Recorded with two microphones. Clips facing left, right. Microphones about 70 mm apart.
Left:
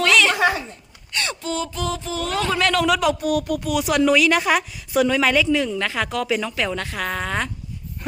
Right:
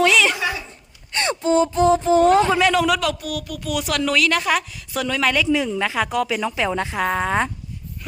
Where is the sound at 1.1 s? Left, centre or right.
Right.